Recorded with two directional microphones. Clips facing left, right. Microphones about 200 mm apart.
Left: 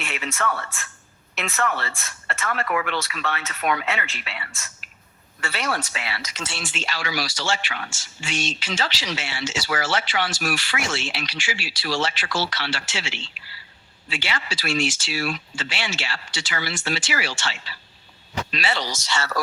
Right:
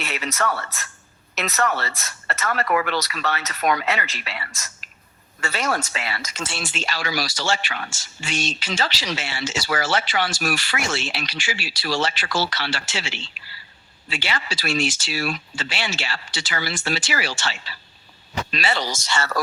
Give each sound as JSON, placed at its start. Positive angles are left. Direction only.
{"t": 0.0, "sound": "speech", "side_deg": -40}